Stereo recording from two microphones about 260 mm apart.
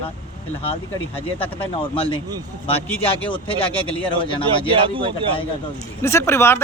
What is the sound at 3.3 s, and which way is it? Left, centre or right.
Speech, left.